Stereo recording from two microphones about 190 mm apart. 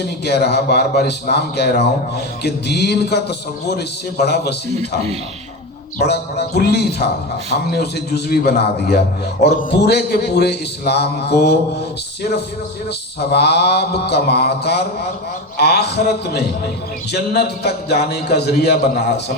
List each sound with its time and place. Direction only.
0.3 s a man's voice: 60° left (ahead or behind)
6.1 s a man's voice: 60° left (ahead or behind)
13.1 s a man's voice: 60° left (ahead or behind)